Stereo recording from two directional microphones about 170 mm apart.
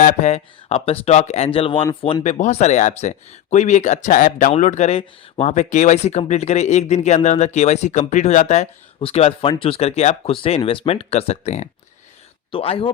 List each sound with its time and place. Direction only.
0.0 s speech: 45° left (ahead or behind); by 2.2 s 25° left (ahead or behind)
2.2 s speech: 45° left (ahead or behind)